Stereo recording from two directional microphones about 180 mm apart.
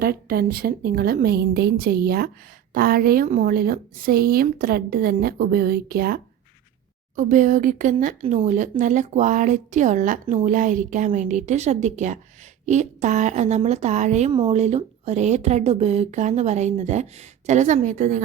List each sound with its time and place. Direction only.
0.0 s a woman's voice: 55° right (ahead or behind)
7.2 s speech: 45° right (ahead or behind)